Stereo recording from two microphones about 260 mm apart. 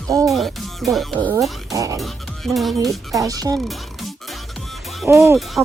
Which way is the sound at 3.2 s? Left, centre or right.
Centre.